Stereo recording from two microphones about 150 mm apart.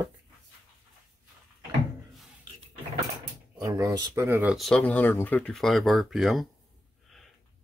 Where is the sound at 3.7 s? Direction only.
25° right (ahead or behind).